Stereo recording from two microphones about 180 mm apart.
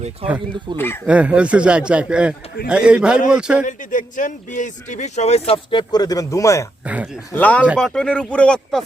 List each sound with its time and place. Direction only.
0.2 s speech: 30° right (ahead or behind)
0.8 s speech: 15° left (ahead or behind)
1.0 s speech: 5° right (ahead or behind)
3.7 s speech: 45° left (ahead or behind); by 6.7 s 15° left (ahead or behind)
6.8 s speech: 5° right (ahead or behind)
7.3 s speech: 10° left (ahead or behind)